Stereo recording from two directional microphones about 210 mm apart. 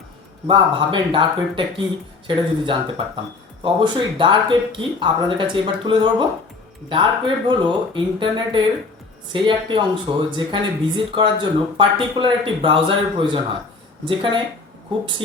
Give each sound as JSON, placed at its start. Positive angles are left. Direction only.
{"t": 0.4, "sound": "speech", "side_deg": -25}